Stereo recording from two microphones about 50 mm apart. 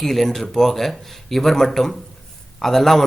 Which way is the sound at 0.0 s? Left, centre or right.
Centre.